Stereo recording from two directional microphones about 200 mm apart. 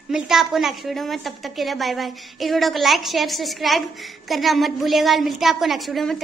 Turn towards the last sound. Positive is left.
turn(degrees=0)  # may be behind; listen again after turning